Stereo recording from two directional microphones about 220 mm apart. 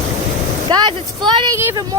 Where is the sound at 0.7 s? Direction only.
20° right (ahead or behind).